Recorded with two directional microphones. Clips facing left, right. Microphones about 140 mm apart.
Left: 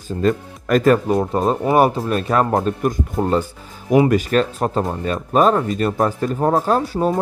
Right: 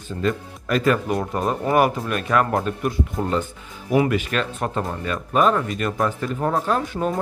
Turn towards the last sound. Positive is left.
turn(degrees=35)  # may be behind; listen again after turning